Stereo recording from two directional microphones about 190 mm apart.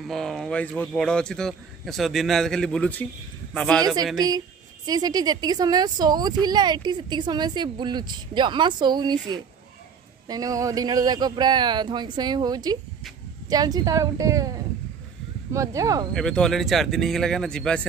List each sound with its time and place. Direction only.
0.1 s a man's voice: centre (ahead or behind)
3.8 s speech: 20° right (ahead or behind)
15.5 s speech: 15° right (ahead or behind)
16.1 s a man's voice: 5° left (ahead or behind)